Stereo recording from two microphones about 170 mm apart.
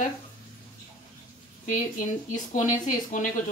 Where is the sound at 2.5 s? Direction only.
50° left (ahead or behind).